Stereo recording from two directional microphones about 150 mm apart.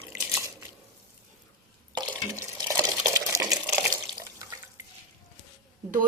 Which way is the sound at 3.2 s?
25° right (ahead or behind).